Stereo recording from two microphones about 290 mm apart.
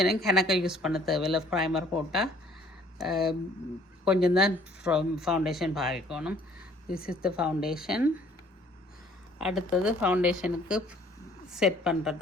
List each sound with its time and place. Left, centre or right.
0.0 s speech: centre
6.9 s a woman's voice: left
7.2 s speech: centre
9.4 s speech: centre